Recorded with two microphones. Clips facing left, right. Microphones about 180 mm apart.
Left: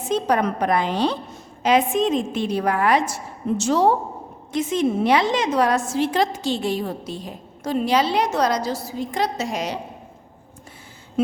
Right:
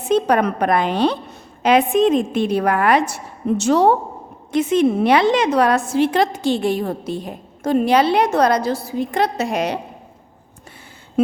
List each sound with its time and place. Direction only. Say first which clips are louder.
0.0 s a woman's voice: right 4 dB; 60° right (ahead or behind)